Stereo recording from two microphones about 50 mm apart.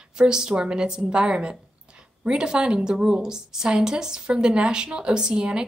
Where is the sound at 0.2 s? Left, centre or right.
Centre.